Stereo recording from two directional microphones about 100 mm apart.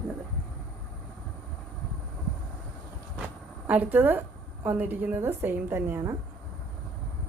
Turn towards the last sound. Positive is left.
turn(degrees=-25)  # may be behind; listen again after turning